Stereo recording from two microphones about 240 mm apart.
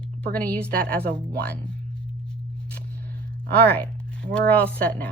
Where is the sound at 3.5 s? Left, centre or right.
Centre.